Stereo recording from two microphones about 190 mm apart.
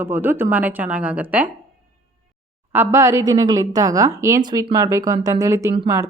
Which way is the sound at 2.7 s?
15° right (ahead or behind).